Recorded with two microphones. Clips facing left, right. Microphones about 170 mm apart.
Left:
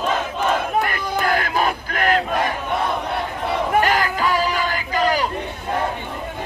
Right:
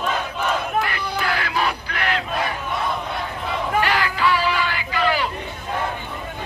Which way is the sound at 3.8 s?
45° left (ahead or behind).